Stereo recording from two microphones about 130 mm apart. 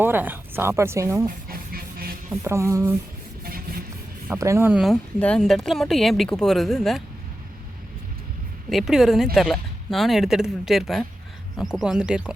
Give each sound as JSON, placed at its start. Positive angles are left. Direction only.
{"t": 0.0, "sound": "speech", "side_deg": -15}
{"t": 2.3, "sound": "speech", "side_deg": -20}
{"t": 4.3, "sound": "speech", "side_deg": -20}
{"t": 4.7, "sound": "speech", "side_deg": 0}
{"t": 8.7, "sound": "speech", "side_deg": -5}